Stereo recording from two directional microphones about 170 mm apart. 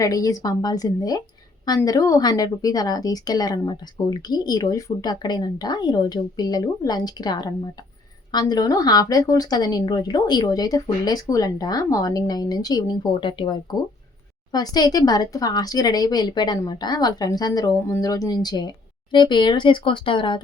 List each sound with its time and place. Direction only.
0.0 s a woman's voice: 20° left (ahead or behind)